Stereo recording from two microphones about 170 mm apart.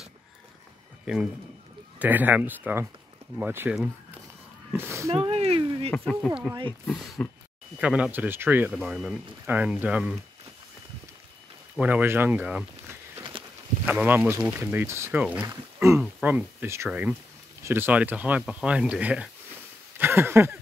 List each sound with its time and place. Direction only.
1.0 s a man's voice: 5° right (ahead or behind)
5.1 s speech: 35° right (ahead or behind)
5.9 s speech: 5° left (ahead or behind)
7.8 s speech: 5° right (ahead or behind)
11.7 s speech: 10° right (ahead or behind)
13.8 s speech: 10° right (ahead or behind)
20.0 s a sound: 15° right (ahead or behind)